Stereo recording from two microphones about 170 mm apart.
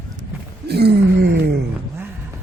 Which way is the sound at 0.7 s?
75° right (ahead or behind).